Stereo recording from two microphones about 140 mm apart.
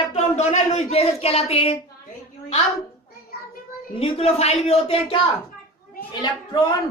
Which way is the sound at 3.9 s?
45° left (ahead or behind).